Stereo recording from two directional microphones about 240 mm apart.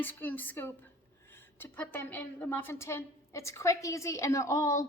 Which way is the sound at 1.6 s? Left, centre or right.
Centre.